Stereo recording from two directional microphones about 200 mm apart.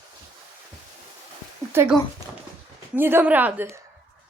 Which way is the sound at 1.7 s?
10° right (ahead or behind).